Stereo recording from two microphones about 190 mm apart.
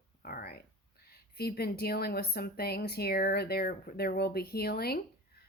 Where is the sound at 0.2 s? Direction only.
50° left (ahead or behind).